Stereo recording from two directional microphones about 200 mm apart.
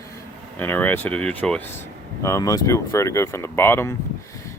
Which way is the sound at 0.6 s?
10° left (ahead or behind).